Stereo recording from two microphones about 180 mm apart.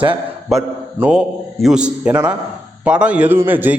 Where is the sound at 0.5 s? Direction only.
Centre (ahead or behind).